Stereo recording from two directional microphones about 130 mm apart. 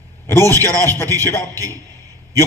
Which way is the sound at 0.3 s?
20° left (ahead or behind).